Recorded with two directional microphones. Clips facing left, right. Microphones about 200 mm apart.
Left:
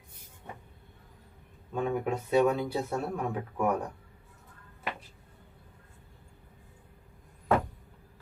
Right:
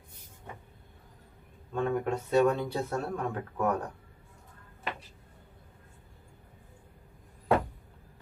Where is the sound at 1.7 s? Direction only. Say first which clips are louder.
Right 1 dB; 10° left (ahead or behind).